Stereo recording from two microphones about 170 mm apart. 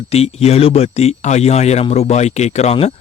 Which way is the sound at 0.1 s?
35° left (ahead or behind).